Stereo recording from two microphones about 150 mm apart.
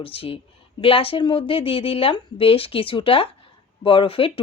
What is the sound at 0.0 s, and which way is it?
Speech, 40° left (ahead or behind).